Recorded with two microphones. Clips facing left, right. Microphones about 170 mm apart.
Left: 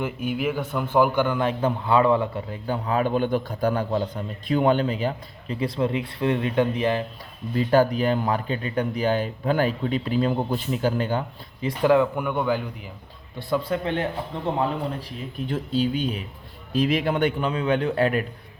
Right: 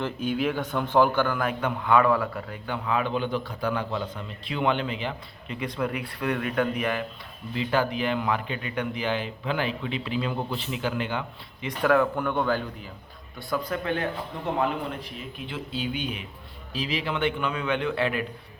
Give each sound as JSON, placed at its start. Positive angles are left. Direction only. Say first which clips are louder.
{"t": 0.0, "sound": "a man's voice", "louder": "left 1 dB", "side_deg": 10}
{"t": 7.5, "sound": "a man's voice", "louder": "left 6 dB", "side_deg": 40}
{"t": 11.8, "sound": "a man's voice", "louder": "left 3 dB", "side_deg": 20}
{"t": 13.5, "sound": "a man's voice", "louder": "left 3 dB", "side_deg": 25}
{"t": 15.4, "sound": "a man's voice", "louder": "left 8 dB", "side_deg": 45}
{"t": 16.7, "sound": "a man's voice", "louder": "left 7 dB", "side_deg": 50}